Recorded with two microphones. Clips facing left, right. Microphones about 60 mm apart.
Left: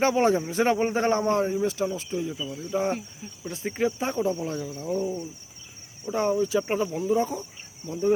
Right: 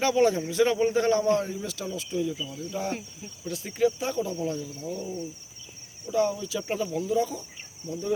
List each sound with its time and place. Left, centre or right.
0.0 s a man's voice: left
6.1 s a man's voice: left